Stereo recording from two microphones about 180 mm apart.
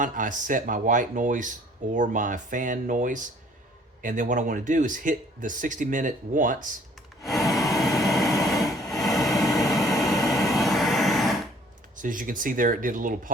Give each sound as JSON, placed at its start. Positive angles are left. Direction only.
{"t": 0.0, "sound": "speech", "side_deg": -45}
{"t": 7.2, "sound": "a sound", "side_deg": 0}
{"t": 10.2, "sound": "vehicle", "side_deg": 0}
{"t": 11.9, "sound": "speech", "side_deg": -45}